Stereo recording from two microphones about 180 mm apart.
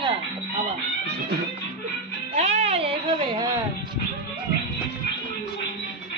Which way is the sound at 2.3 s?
35° right (ahead or behind).